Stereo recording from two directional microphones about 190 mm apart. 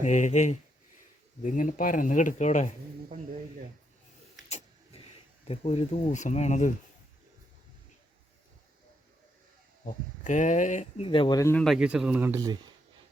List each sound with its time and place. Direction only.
0.0 s speech: 40° left (ahead or behind)
4.4 s a sound: 35° left (ahead or behind)
9.8 s speech: 40° left (ahead or behind)
11.0 s speech: 25° left (ahead or behind)
11.5 s speech: centre (ahead or behind); by 12.7 s 20° right (ahead or behind)